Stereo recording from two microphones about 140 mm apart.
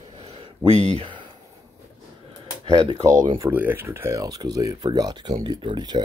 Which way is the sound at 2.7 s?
25° right (ahead or behind).